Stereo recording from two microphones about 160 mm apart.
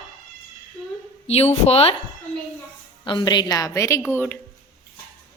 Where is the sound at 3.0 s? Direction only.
30° left (ahead or behind); by 4.4 s 15° left (ahead or behind).